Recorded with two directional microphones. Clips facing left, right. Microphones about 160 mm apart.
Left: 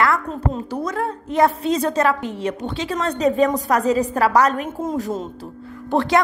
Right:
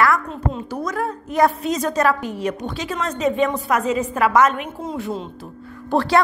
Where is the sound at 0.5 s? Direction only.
30° left (ahead or behind).